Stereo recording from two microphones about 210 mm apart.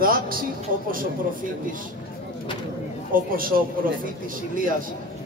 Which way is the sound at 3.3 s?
45° right (ahead or behind).